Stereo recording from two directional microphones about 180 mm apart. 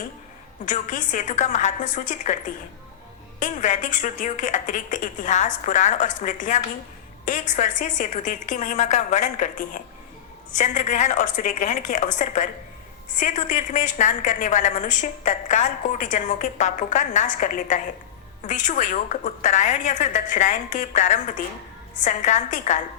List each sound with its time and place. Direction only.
0.6 s a woman's voice: 45° left (ahead or behind)
3.4 s a woman's voice: 45° left (ahead or behind)